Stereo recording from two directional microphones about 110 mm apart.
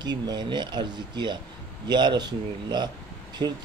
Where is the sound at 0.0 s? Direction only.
40° right (ahead or behind).